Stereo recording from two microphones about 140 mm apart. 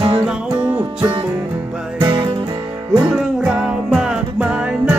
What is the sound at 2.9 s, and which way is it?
Music, 5° right (ahead or behind).